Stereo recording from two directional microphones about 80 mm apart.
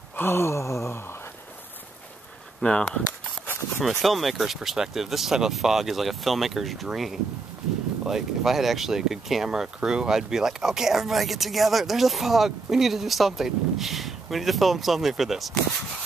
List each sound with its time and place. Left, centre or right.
0.1 s gasp: left
2.6 s speech: centre
4.0 s speech: centre